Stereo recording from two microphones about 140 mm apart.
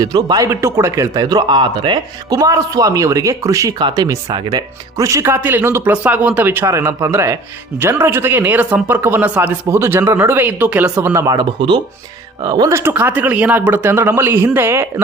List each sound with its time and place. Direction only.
0.0 s a man's voice: 30° right (ahead or behind); by 10.9 s 10° right (ahead or behind)
10.9 s a man's voice: 20° right (ahead or behind)
12.7 s speech: 15° right (ahead or behind)